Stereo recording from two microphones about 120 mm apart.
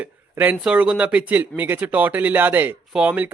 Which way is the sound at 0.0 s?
15° right (ahead or behind).